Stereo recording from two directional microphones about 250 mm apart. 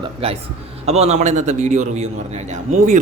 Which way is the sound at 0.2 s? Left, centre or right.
Right.